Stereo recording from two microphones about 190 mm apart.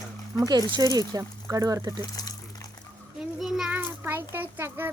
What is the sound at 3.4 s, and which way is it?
A child's voice, centre (ahead or behind).